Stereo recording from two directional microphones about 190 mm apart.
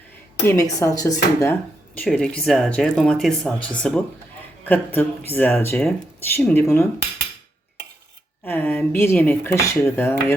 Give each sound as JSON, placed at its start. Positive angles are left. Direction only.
{"t": 0.4, "sound": "speech", "side_deg": 15}
{"t": 2.0, "sound": "speech", "side_deg": 5}
{"t": 8.4, "sound": "speech", "side_deg": 10}